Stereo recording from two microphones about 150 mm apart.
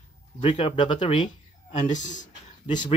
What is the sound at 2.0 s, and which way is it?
Speech, 55° left (ahead or behind).